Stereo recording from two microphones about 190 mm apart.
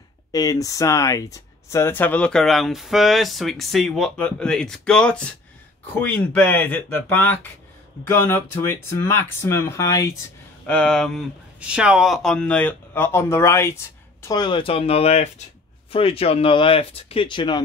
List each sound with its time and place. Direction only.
0.3 s speech: 20° left (ahead or behind)
10.7 s speech: 5° left (ahead or behind); by 17.6 s 25° left (ahead or behind)